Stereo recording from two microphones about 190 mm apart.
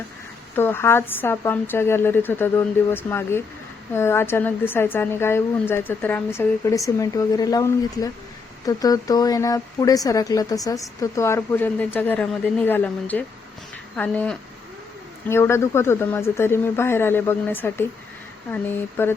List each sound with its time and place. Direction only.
0.5 s a woman's voice: 10° left (ahead or behind)